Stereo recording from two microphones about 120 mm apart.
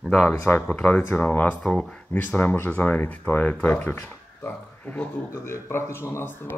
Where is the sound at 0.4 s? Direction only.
20° left (ahead or behind).